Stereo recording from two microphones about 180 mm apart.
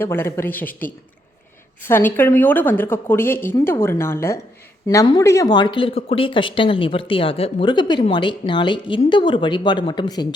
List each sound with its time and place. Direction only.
0.0 s speech: 10° left (ahead or behind)
1.8 s speech: 10° left (ahead or behind)